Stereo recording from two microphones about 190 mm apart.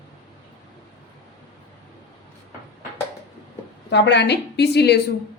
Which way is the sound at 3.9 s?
65° left (ahead or behind).